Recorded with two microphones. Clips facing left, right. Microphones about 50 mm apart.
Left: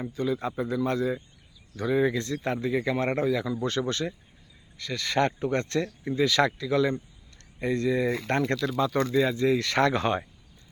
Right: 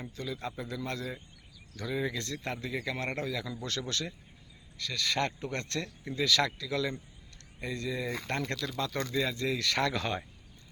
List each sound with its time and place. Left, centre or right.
0.0 s speech: left
1.7 s speech: left
2.1 s speech: left
7.6 s speech: left
8.7 s speech: centre; by 10.2 s left